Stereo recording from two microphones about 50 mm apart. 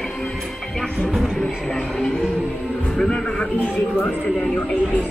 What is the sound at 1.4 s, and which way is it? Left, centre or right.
A man's voice, centre.